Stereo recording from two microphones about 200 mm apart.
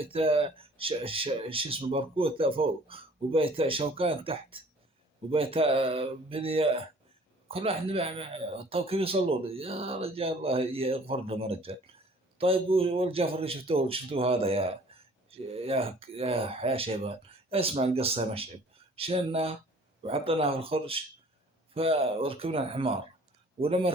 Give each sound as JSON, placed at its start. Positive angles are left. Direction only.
{"t": 0.0, "sound": "a man's voice", "side_deg": -30}